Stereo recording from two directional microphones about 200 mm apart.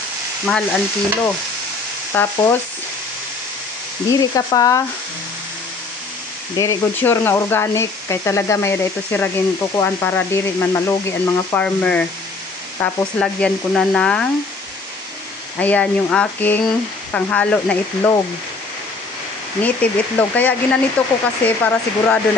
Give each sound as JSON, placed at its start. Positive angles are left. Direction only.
{"t": 0.5, "sound": "speech", "side_deg": 0}
{"t": 4.1, "sound": "speech", "side_deg": 20}
{"t": 6.5, "sound": "speech", "side_deg": 15}
{"t": 15.6, "sound": "speech", "side_deg": 5}
{"t": 19.6, "sound": "speech", "side_deg": 10}